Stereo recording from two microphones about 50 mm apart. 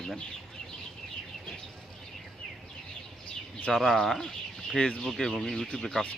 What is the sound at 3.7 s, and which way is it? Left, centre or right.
Speech, centre.